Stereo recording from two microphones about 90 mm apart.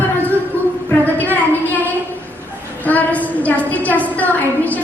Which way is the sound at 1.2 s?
20° left (ahead or behind).